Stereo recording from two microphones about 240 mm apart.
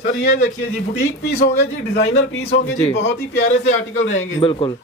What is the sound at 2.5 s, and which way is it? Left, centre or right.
Speech, left.